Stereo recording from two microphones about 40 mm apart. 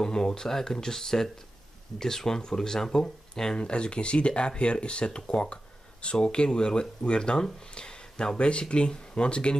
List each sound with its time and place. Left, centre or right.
0.0 s speech: centre
3.5 s speech: left